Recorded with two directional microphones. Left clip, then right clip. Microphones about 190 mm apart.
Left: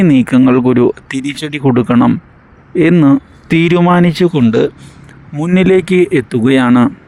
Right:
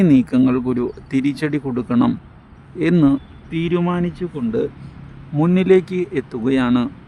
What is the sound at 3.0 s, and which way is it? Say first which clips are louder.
Speech: left 7 dB; 50° left (ahead or behind).